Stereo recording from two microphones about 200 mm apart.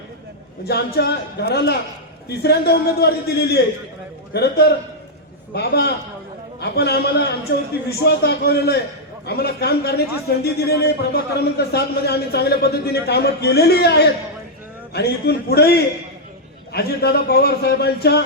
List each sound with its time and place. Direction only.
0.9 s a man's voice: 55° left (ahead or behind)